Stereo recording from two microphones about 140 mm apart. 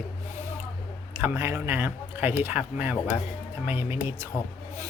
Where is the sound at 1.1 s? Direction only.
15° right (ahead or behind).